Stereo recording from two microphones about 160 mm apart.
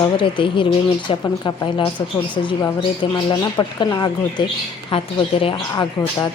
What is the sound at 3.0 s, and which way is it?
A woman's voice, 30° left (ahead or behind).